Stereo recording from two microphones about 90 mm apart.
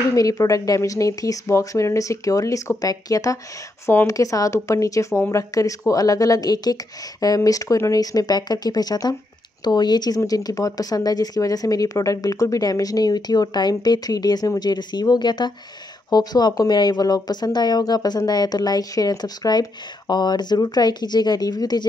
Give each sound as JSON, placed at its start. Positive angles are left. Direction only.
{"t": 0.1, "sound": "speech", "side_deg": 40}
{"t": 3.8, "sound": "speech", "side_deg": 30}